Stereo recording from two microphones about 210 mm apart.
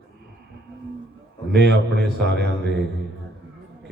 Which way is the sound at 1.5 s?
55° right (ahead or behind).